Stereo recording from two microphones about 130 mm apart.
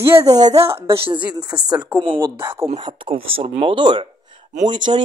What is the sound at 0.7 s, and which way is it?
Speech, 45° right (ahead or behind).